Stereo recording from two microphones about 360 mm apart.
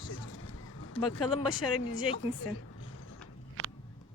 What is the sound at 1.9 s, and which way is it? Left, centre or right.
A woman's voice, left.